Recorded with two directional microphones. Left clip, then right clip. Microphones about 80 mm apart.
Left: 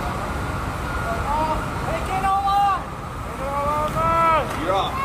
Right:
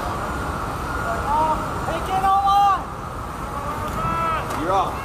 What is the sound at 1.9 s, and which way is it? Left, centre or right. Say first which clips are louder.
Boat: right 2 dB; centre.